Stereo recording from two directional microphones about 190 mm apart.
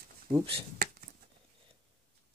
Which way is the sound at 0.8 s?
55° right (ahead or behind).